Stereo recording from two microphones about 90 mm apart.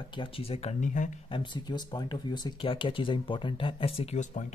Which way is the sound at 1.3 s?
60° left (ahead or behind).